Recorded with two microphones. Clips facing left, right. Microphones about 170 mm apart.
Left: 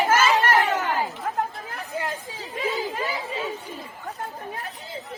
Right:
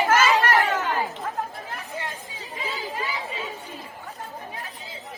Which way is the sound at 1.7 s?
70° left (ahead or behind).